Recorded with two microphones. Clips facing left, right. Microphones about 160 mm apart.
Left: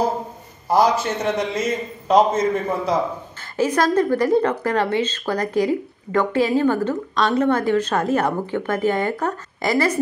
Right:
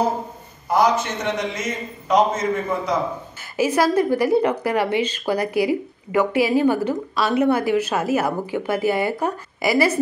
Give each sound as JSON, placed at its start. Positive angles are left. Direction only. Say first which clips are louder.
{"t": 0.7, "sound": "a man's voice", "louder": "left 1 dB", "side_deg": 30}
{"t": 3.5, "sound": "speech", "louder": "even", "side_deg": -10}